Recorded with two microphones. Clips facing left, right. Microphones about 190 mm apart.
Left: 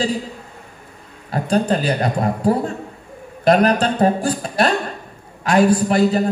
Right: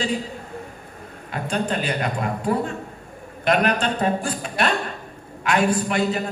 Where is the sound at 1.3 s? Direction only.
35° left (ahead or behind).